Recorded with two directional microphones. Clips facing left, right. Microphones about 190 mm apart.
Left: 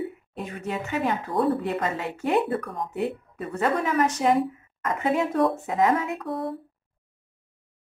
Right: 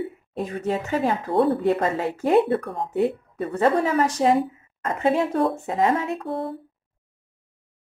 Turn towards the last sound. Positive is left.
turn(degrees=-30)  # may be behind; listen again after turning